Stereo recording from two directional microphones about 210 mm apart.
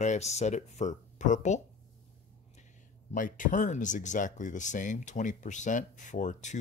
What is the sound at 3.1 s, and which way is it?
Speech, 40° left (ahead or behind).